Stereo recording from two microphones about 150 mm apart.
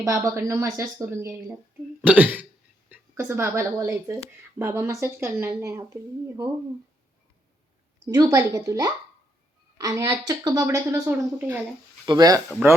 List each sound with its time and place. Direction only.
0.0 s a woman's voice: 20° right (ahead or behind)
8.1 s speech: 20° right (ahead or behind)
11.3 s speech: 15° right (ahead or behind)
12.0 s speech: 25° right (ahead or behind)
12.6 s speech: 10° right (ahead or behind)